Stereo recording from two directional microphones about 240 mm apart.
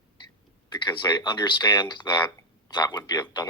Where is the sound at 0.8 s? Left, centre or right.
Centre.